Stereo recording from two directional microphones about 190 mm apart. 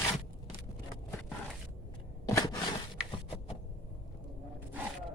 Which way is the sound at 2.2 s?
20° left (ahead or behind).